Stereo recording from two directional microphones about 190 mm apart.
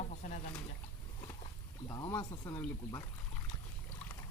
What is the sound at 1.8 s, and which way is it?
Speech, 20° left (ahead or behind).